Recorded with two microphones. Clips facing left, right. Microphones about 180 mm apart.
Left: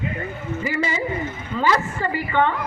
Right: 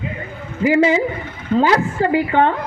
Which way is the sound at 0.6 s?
90° right.